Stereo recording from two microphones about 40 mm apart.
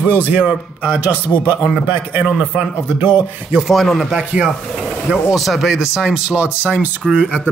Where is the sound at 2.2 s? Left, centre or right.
Right.